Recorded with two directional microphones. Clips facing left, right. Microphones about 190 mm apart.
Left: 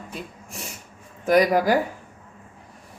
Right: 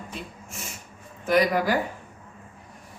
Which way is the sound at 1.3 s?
40° left (ahead or behind).